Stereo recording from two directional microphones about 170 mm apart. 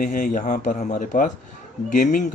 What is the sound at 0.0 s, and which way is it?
Speech, 55° left (ahead or behind).